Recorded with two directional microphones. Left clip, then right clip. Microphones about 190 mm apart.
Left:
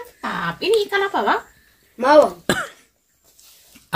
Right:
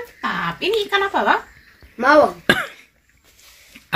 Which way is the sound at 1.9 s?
30° left (ahead or behind).